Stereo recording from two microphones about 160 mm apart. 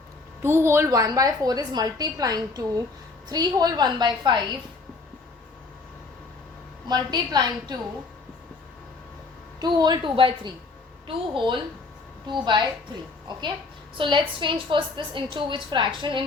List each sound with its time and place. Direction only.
0.4 s a woman's voice: 15° right (ahead or behind)
6.8 s a woman's voice: 25° right (ahead or behind)
9.6 s a woman's voice: 25° right (ahead or behind)